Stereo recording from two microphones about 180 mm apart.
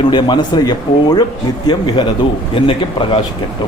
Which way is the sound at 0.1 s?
25° left (ahead or behind).